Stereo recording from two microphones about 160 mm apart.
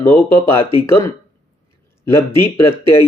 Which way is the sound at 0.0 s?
15° left (ahead or behind).